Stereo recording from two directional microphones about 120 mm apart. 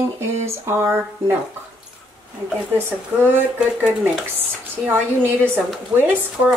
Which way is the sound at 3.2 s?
15° right (ahead or behind).